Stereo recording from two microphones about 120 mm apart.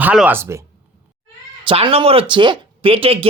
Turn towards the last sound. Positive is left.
turn(degrees=-50)  # may be behind; listen again after turning